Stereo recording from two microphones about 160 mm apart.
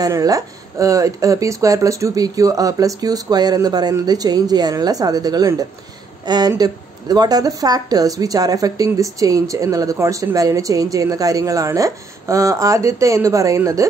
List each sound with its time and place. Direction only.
0.0 s speech: 20° right (ahead or behind)